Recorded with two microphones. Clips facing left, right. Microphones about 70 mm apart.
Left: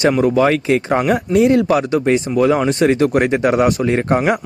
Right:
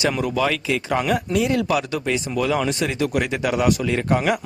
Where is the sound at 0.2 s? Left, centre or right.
Left.